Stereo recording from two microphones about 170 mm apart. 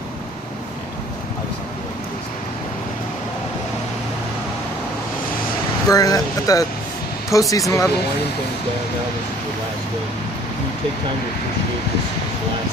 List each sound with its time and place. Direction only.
5.9 s speech: 20° left (ahead or behind)